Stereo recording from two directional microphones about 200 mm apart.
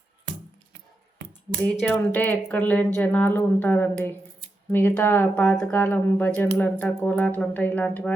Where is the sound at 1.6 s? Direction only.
5° left (ahead or behind).